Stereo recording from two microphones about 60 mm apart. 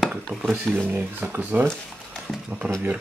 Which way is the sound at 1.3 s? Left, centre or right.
Right.